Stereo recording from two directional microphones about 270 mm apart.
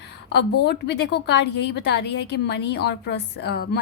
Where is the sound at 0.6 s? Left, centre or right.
Left.